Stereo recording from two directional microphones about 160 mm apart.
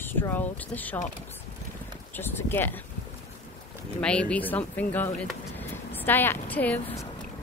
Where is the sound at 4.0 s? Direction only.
5° left (ahead or behind).